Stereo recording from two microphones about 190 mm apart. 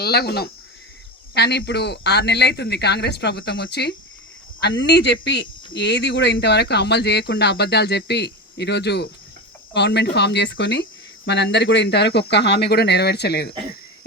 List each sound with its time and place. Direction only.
0.0 s speech: 55° left (ahead or behind)